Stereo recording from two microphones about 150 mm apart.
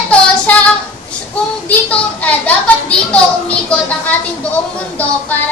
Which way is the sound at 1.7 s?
10° left (ahead or behind).